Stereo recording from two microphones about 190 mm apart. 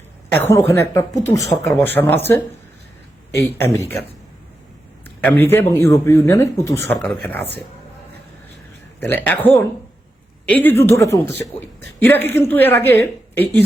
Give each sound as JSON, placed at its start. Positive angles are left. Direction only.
{"t": 0.3, "sound": "speech", "side_deg": 10}
{"t": 3.6, "sound": "speech", "side_deg": 10}
{"t": 5.0, "sound": "speech", "side_deg": 10}
{"t": 9.0, "sound": "speech", "side_deg": 10}